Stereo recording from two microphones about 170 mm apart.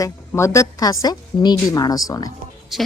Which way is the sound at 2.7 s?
Centre (ahead or behind).